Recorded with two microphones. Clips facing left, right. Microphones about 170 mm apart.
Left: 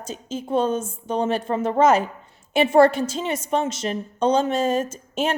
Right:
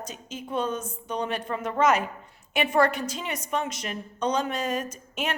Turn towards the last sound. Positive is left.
turn(degrees=30)  # may be behind; listen again after turning